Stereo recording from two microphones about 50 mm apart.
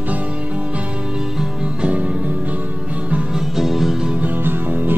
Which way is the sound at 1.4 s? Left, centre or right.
Right.